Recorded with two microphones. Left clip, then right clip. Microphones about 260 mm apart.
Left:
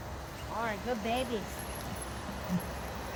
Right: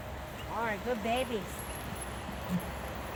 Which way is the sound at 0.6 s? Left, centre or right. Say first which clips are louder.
Right 1 dB; right.